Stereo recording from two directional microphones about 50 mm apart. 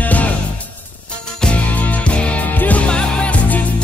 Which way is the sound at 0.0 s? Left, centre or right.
Left.